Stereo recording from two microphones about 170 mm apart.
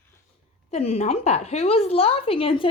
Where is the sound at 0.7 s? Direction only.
40° left (ahead or behind).